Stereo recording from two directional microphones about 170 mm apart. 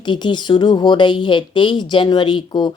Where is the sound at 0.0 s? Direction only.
25° left (ahead or behind).